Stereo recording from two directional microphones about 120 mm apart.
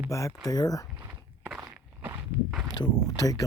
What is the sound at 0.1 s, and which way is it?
Speech, 25° left (ahead or behind).